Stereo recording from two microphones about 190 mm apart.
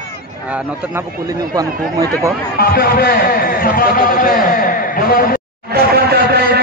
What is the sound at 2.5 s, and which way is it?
A man's voice, 55° left (ahead or behind).